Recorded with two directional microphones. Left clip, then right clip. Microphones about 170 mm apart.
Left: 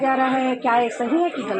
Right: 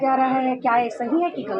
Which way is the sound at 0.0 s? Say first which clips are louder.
Even; 15° left (ahead or behind).